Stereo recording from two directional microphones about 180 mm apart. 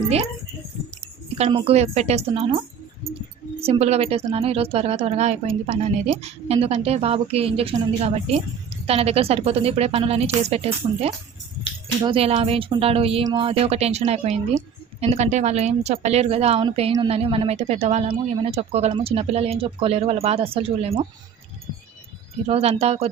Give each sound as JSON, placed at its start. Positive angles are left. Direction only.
{"t": 1.4, "sound": "speech", "side_deg": -30}
{"t": 3.6, "sound": "speech", "side_deg": -35}
{"t": 22.4, "sound": "speech", "side_deg": -35}